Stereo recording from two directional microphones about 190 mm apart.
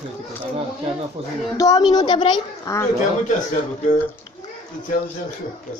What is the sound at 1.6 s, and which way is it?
A woman's voice, 20° left (ahead or behind).